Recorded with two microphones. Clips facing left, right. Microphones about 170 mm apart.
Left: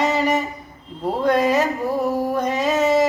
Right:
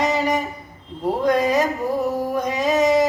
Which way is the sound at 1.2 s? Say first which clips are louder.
Left 1 dB; 10° right (ahead or behind).